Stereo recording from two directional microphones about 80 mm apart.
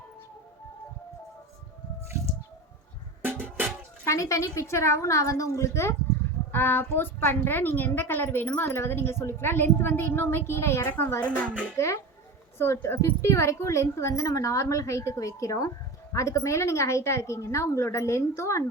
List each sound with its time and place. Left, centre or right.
3.2 s music: right
4.0 s a woman's voice: left
12.5 s a woman's voice: left